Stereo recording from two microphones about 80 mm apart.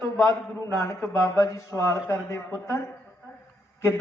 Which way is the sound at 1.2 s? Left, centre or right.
Left.